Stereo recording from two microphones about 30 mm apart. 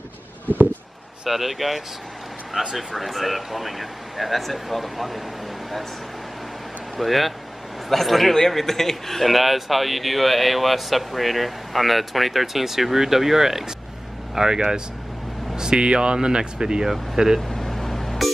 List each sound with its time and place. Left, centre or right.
1.3 s a man's voice: centre
2.6 s speech: right
3.0 s a man's voice: centre
7.0 s a man's voice: centre; by 16.8 s right
16.8 s speech: centre
17.5 s a sound: centre